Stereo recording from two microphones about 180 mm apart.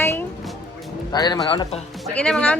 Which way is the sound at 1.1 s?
20° left (ahead or behind).